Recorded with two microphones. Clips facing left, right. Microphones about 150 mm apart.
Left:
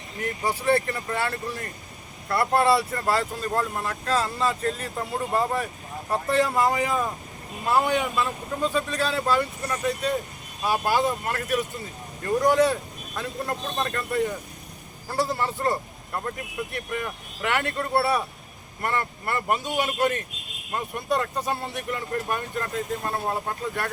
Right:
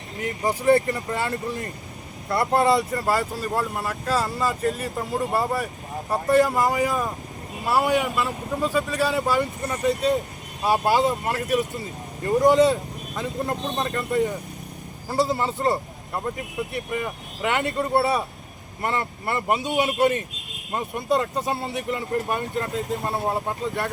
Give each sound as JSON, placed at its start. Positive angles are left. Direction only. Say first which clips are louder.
{"t": 0.2, "sound": "a man's voice", "louder": "right 2 dB", "side_deg": -20}
{"t": 21.5, "sound": "speech", "louder": "right 3 dB", "side_deg": -5}
{"t": 22.1, "sound": "a man's voice", "louder": "right 3 dB", "side_deg": -20}